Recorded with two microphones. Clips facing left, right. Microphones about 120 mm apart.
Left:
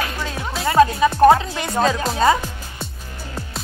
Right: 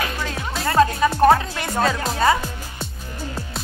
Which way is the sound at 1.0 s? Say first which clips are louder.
Left 2 dB; 15° left (ahead or behind).